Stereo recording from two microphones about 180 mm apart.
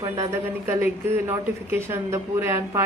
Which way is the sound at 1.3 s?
15° right (ahead or behind).